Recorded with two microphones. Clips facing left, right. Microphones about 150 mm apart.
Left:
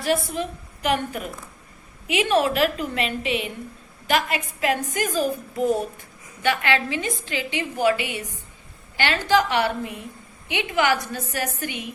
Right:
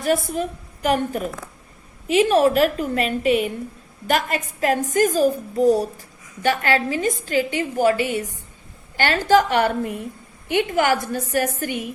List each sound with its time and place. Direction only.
0.0 s a woman's voice: 45° right (ahead or behind)